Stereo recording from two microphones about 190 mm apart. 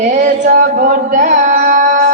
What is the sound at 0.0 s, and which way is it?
Music, 40° right (ahead or behind).